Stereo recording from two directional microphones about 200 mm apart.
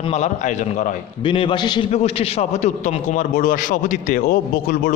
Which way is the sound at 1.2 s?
25° left (ahead or behind).